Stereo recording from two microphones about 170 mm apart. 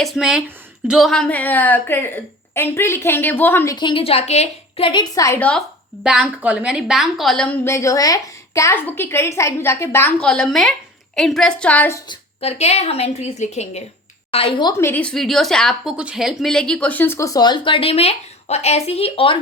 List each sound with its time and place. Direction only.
0.0 s a woman's voice: centre (ahead or behind)
3.8 s a woman's voice: 30° left (ahead or behind); by 5.6 s 5° left (ahead or behind)
6.0 s a woman's voice: 5° right (ahead or behind); by 11.9 s 10° left (ahead or behind)
12.0 s a woman's voice: 35° left (ahead or behind)
14.7 s a woman's voice: 15° left (ahead or behind); by 19.4 s 30° left (ahead or behind)